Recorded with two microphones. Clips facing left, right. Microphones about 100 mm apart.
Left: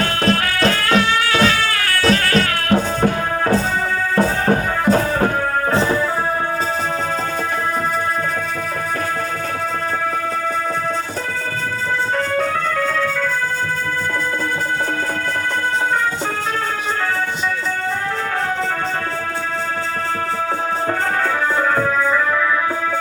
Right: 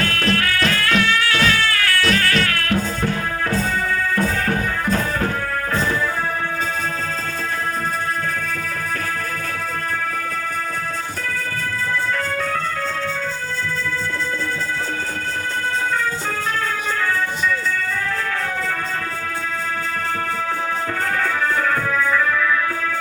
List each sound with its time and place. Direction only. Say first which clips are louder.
0.0 s music: left 3 dB; 25° left (ahead or behind)
4.1 s music: left 4 dB; 25° left (ahead or behind)